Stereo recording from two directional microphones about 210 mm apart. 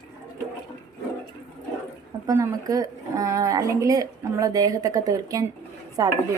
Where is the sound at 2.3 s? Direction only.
15° right (ahead or behind).